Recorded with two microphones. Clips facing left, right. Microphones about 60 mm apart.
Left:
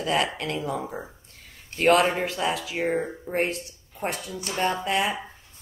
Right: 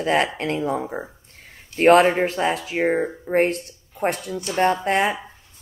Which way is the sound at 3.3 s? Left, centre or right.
Right.